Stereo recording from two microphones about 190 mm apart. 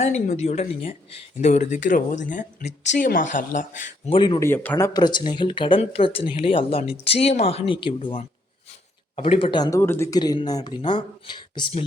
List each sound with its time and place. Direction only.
0.0 s speech: 35° left (ahead or behind)
4.1 s speech: 25° left (ahead or behind)
4.4 s speech: 10° left (ahead or behind)
4.9 s speech: 25° left (ahead or behind)